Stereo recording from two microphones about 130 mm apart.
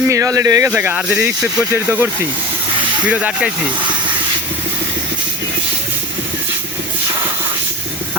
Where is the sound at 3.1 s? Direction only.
10° right (ahead or behind).